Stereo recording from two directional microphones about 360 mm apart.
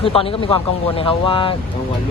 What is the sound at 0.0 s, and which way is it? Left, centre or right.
Speech, centre.